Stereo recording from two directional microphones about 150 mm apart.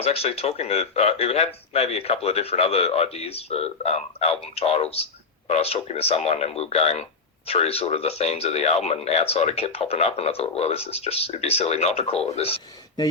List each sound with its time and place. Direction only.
0.0 s speech: 45° left (ahead or behind)